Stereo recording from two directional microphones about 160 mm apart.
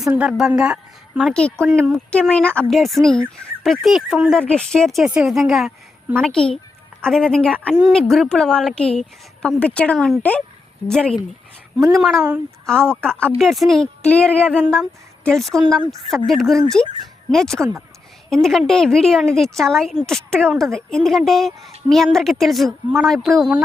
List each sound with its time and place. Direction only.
0.0 s a woman's voice: 10° right (ahead or behind)
1.3 s speech: 5° left (ahead or behind)
1.6 s speech: 10° right (ahead or behind)
1.9 s a woman's voice: 5° left (ahead or behind)